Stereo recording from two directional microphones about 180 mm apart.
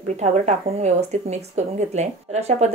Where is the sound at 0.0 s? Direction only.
40° right (ahead or behind).